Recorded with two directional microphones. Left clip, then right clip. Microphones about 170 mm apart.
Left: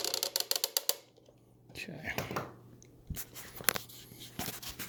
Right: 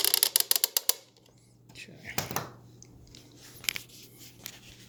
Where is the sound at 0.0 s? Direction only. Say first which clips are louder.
Right 7 dB; 20° right (ahead or behind).